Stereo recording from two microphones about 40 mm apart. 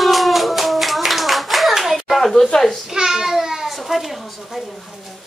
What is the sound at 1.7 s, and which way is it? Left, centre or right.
Hands, centre.